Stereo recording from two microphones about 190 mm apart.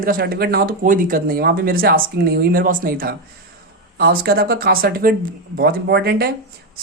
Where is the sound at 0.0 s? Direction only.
50° right (ahead or behind).